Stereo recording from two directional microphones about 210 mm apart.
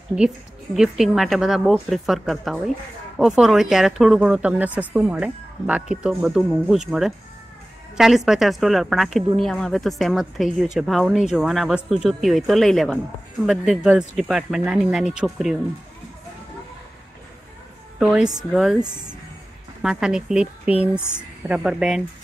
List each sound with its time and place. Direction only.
0.7 s speech: centre (ahead or behind)
8.3 s speech: centre (ahead or behind)
17.9 s a woman's voice: 5° right (ahead or behind)
19.8 s speech: centre (ahead or behind)